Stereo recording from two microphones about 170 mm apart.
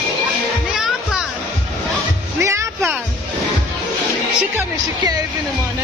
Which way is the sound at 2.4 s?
15° right (ahead or behind).